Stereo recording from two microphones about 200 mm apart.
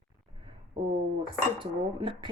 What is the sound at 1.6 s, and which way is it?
Dishes, 25° right (ahead or behind).